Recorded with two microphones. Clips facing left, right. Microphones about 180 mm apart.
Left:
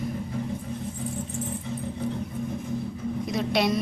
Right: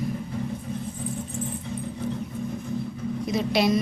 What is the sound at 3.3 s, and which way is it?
Speech, centre (ahead or behind).